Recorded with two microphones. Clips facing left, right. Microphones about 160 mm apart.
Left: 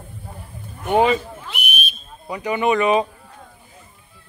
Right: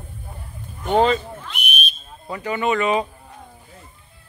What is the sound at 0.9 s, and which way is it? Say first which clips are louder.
Speech: left 1 dB; 10° left (ahead or behind).